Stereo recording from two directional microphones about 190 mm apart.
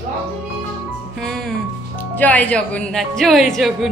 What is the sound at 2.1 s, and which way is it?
Speech, 10° left (ahead or behind).